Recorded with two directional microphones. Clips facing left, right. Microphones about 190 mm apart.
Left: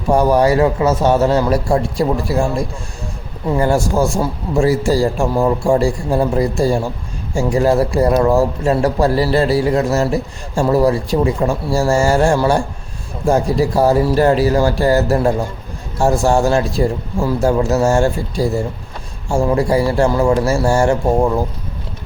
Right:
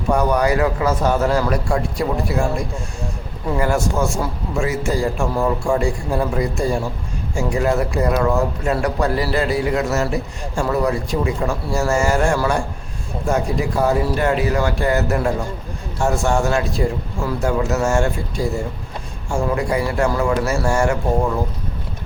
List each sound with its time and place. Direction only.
0.1 s a man's voice: 30° left (ahead or behind)
3.5 s a man's voice: 30° left (ahead or behind)